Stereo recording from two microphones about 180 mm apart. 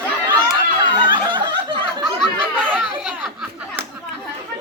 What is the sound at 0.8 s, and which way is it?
Snicker, 25° right (ahead or behind).